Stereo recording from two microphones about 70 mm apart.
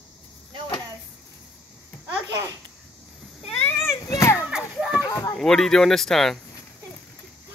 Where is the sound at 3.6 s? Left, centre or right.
Left.